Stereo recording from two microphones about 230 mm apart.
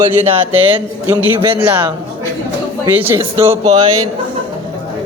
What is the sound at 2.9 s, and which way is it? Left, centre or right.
Speech, centre.